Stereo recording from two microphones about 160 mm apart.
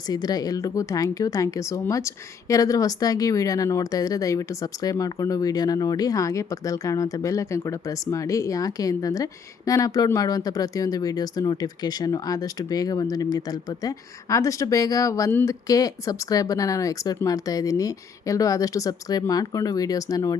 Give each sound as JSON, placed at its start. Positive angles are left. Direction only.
{"t": 0.1, "sound": "speech", "side_deg": 25}